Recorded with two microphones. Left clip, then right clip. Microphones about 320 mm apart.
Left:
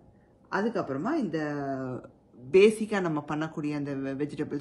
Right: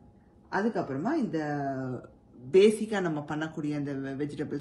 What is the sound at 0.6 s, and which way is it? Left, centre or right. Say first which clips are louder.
A woman's voice: even; centre.